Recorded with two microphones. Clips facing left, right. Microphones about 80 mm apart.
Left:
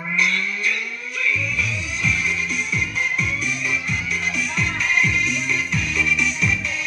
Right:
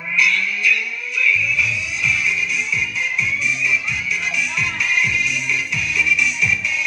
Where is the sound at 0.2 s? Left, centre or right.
Left.